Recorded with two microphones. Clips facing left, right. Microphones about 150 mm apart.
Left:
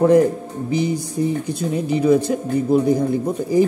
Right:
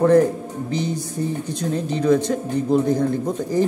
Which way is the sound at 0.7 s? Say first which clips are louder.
Left 5 dB; 10° left (ahead or behind).